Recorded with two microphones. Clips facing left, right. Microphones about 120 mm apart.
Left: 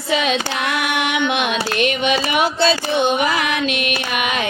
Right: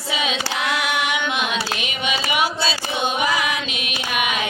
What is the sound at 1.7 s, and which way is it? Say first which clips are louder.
Carnatic music: left 9 dB; 55° left (ahead or behind).